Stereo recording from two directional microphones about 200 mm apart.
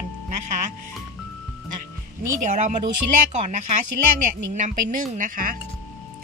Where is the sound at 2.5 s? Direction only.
35° right (ahead or behind).